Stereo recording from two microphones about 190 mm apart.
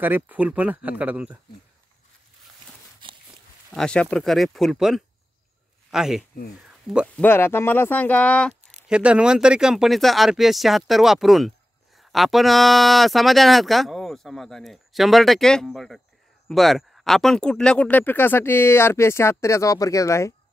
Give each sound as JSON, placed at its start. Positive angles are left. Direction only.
{"t": 0.0, "sound": "speech", "side_deg": -10}
{"t": 3.0, "sound": "walk", "side_deg": -25}
{"t": 3.7, "sound": "speech", "side_deg": 5}
{"t": 7.2, "sound": "speech", "side_deg": 10}
{"t": 8.8, "sound": "speech", "side_deg": -5}